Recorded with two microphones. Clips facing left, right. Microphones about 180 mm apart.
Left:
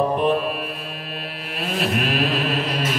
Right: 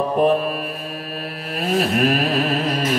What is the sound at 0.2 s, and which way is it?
Mantra, 40° right (ahead or behind).